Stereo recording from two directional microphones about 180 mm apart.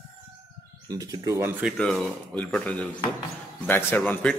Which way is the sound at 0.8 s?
20° right (ahead or behind).